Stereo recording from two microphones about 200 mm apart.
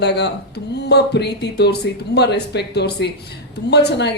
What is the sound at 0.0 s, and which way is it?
Speech, 55° left (ahead or behind).